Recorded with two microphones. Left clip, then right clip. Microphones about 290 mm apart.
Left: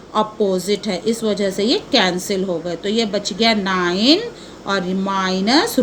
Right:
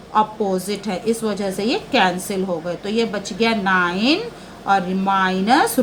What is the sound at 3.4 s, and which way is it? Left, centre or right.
Speech, centre.